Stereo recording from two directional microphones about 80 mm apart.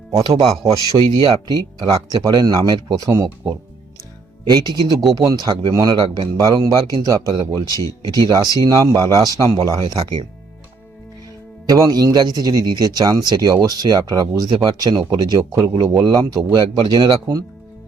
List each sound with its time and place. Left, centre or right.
0.2 s speech: right
4.4 s speech: right
6.9 s speech: right
7.7 s speech: left
8.1 s speech: right
11.7 s speech: right
16.0 s speech: right